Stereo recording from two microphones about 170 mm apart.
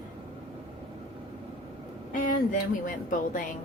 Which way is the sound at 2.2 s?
50° left (ahead or behind).